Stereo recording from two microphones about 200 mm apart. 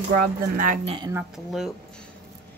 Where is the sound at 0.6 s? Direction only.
40° right (ahead or behind).